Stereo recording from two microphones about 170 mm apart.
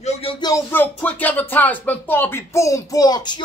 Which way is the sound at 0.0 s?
35° left (ahead or behind).